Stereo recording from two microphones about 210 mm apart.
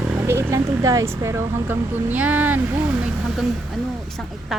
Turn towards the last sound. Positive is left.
turn(degrees=0)  # may be behind; listen again after turning